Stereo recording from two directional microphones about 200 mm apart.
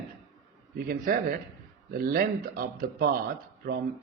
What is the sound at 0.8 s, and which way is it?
Speech, 45° right (ahead or behind).